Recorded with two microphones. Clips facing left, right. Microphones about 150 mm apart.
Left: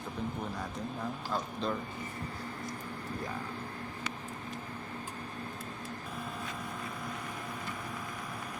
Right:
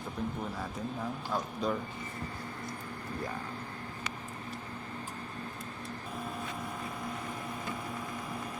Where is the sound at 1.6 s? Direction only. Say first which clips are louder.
Right 3 dB; 10° right (ahead or behind).